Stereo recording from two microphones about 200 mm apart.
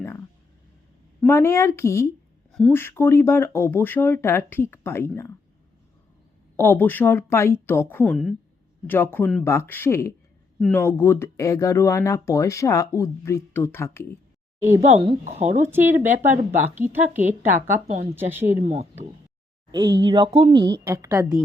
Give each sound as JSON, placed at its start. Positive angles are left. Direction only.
{"t": 1.3, "sound": "speech", "side_deg": 10}
{"t": 6.6, "sound": "speech", "side_deg": 10}
{"t": 8.0, "sound": "a woman's voice", "side_deg": 0}
{"t": 14.8, "sound": "speech", "side_deg": -35}
{"t": 15.6, "sound": "a woman's voice", "side_deg": -10}
{"t": 18.7, "sound": "speech", "side_deg": -35}
{"t": 19.7, "sound": "a woman's voice", "side_deg": -20}